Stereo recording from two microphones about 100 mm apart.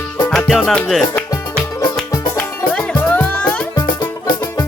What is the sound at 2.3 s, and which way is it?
Music, 10° left (ahead or behind).